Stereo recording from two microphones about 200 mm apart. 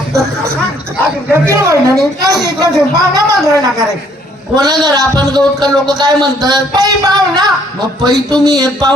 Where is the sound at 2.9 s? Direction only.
15° right (ahead or behind).